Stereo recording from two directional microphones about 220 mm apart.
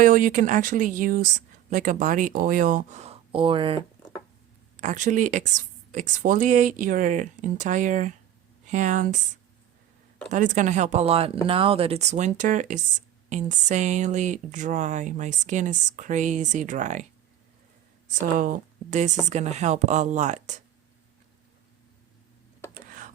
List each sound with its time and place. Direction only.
0.0 s speech: 40° right (ahead or behind); by 3.8 s 25° right (ahead or behind)
4.8 s speech: 35° right (ahead or behind)
10.3 s speech: 35° right (ahead or behind)
18.1 s speech: 40° right (ahead or behind)
22.7 s a sound: 35° right (ahead or behind)